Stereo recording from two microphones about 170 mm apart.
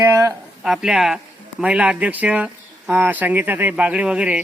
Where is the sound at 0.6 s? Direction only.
5° right (ahead or behind).